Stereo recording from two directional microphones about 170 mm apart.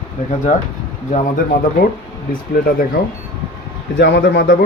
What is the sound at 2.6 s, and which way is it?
Speech, 60° left (ahead or behind).